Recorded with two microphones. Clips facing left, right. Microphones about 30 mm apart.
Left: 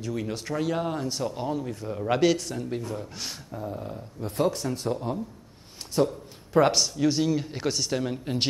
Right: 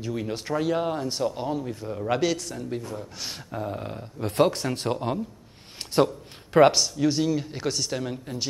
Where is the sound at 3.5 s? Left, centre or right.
Right.